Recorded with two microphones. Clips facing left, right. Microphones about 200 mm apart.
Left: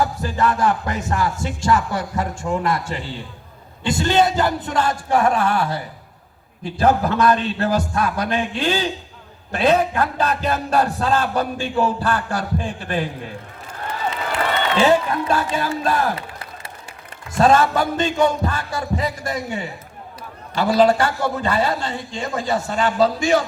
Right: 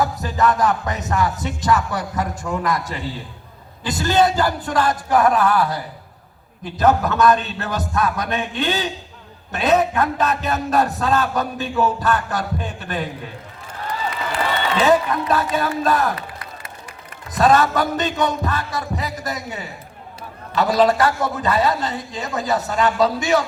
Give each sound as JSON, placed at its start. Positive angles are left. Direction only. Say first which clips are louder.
{"t": 0.2, "sound": "a man's voice", "louder": "right 1 dB", "side_deg": 30}
{"t": 6.7, "sound": "music", "louder": "even", "side_deg": 30}
{"t": 14.8, "sound": "a man's voice", "louder": "even", "side_deg": 30}